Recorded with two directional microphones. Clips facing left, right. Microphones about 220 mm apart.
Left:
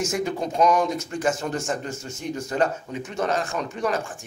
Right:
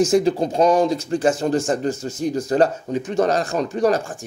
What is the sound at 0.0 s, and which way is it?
Speech, 35° right (ahead or behind).